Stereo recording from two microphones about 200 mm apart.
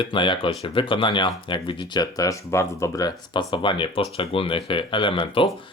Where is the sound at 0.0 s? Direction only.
25° left (ahead or behind).